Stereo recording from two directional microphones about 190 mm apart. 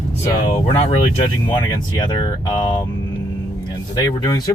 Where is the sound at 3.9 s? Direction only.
20° left (ahead or behind).